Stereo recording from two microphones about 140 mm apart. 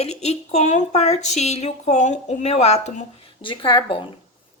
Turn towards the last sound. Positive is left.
turn(degrees=35)  # may be behind; listen again after turning